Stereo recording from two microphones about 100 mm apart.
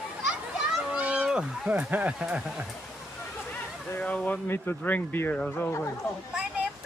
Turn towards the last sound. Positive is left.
turn(degrees=-5)  # may be behind; listen again after turning